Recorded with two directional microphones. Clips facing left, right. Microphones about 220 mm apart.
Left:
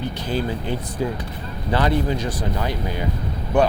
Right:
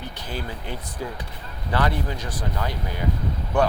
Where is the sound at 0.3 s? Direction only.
25° left (ahead or behind).